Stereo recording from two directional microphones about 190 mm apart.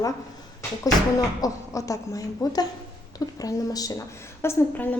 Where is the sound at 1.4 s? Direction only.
15° left (ahead or behind).